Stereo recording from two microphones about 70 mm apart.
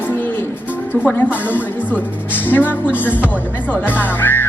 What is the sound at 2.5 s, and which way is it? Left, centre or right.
Speech, left.